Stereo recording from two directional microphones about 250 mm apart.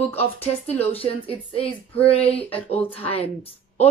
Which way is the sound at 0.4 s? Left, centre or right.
Left.